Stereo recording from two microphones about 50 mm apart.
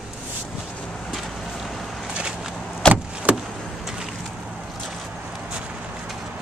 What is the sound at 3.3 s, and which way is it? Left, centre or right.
Vehicle, right.